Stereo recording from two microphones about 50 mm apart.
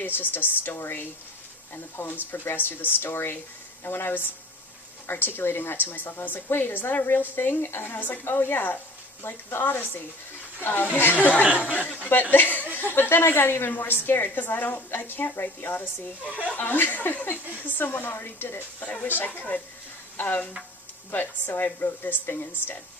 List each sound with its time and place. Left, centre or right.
0.0 s a woman's voice: left
8.2 s a woman's voice: left
9.2 s a woman's voice: left
12.3 s a woman's voice: left
16.4 s speech: left
16.6 s a woman's voice: left
18.8 s a woman's voice: left
21.1 s a woman's voice: left